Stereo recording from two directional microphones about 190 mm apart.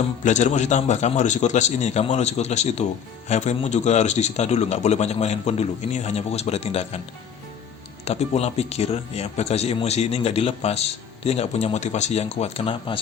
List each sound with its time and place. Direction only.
0.2 s a man's voice: 40° left (ahead or behind)
8.0 s a man's voice: 35° left (ahead or behind)